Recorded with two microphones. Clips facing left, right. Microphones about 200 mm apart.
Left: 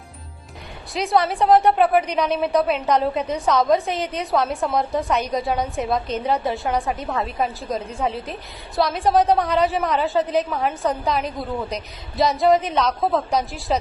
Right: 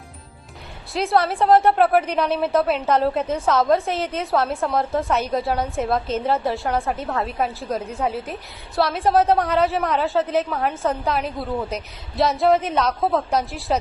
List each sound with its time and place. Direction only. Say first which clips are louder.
0.9 s a woman's voice: even; centre (ahead or behind)